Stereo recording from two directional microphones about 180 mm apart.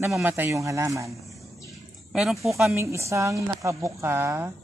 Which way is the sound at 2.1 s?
5° right (ahead or behind).